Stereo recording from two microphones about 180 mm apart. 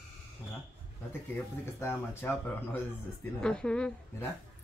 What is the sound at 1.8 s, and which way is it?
A child's voice, 15° left (ahead or behind).